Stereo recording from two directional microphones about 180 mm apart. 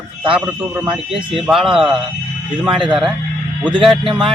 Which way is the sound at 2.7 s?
25° right (ahead or behind).